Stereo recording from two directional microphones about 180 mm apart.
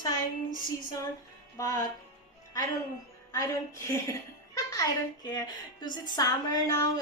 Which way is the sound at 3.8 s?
15° left (ahead or behind).